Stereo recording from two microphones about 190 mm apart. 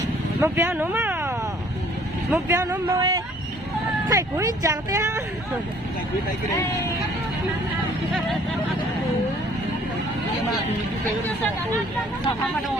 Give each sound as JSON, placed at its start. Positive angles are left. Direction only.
{"t": 0.4, "sound": "speech", "side_deg": -10}
{"t": 2.3, "sound": "speech", "side_deg": -10}